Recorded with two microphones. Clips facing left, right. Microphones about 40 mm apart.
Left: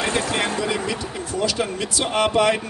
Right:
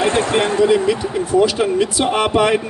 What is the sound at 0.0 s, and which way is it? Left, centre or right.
Speech, right.